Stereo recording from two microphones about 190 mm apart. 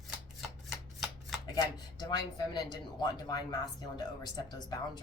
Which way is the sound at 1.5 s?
20° left (ahead or behind).